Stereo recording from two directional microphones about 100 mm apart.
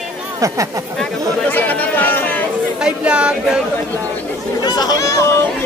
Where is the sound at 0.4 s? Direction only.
35° right (ahead or behind).